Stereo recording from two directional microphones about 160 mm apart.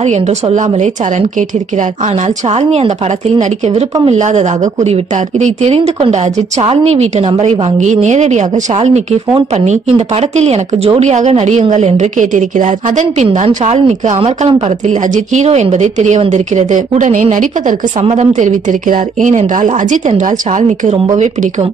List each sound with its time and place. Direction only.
0.0 s a woman's voice: 45° right (ahead or behind)